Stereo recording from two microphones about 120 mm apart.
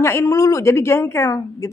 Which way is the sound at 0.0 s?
25° left (ahead or behind).